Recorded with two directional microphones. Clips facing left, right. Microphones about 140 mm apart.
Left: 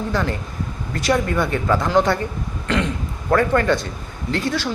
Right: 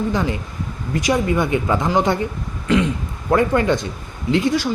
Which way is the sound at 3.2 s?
10° right (ahead or behind).